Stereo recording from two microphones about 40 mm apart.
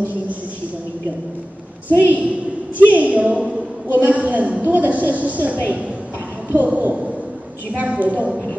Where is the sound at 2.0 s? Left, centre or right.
Right.